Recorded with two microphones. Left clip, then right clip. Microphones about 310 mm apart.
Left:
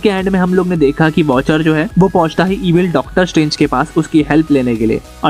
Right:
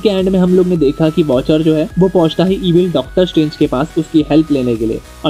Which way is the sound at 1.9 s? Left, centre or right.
Left.